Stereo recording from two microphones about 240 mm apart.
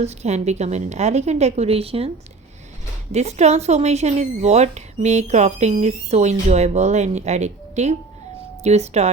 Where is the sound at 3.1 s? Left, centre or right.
Right.